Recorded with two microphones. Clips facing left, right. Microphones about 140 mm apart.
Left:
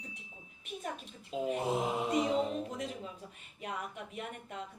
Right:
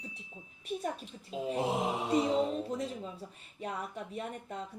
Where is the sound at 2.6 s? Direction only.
35° right (ahead or behind).